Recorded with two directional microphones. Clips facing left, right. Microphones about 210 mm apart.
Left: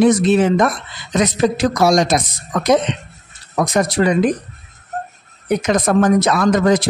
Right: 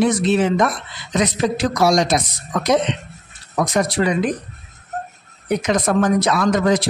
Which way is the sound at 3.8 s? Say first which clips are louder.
Left 3 dB; 45° left (ahead or behind).